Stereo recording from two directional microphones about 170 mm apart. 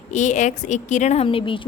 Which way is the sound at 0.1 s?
45° left (ahead or behind).